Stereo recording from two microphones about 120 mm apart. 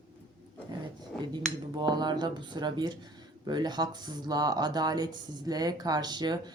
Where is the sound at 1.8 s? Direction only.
35° right (ahead or behind).